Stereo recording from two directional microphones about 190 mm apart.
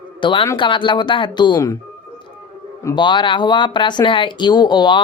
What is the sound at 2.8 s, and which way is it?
A man's voice, 20° left (ahead or behind).